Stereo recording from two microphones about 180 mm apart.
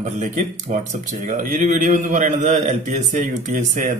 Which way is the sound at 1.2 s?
45° right (ahead or behind).